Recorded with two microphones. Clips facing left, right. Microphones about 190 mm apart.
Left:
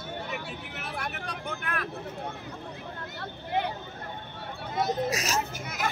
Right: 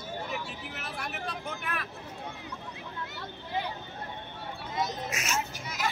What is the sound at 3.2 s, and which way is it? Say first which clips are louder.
Vehicle: left 5 dB; 60° left (ahead or behind).